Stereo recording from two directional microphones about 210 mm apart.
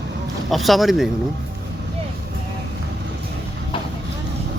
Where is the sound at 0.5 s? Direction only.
Centre (ahead or behind).